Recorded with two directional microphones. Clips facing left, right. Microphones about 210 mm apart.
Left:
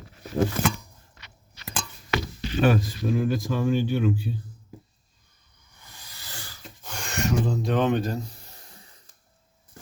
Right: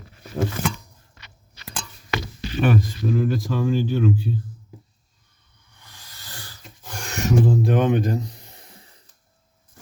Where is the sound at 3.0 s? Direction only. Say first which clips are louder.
Right 2 dB; 5° left (ahead or behind).